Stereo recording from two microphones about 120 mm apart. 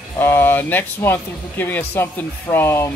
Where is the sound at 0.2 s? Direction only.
15° left (ahead or behind).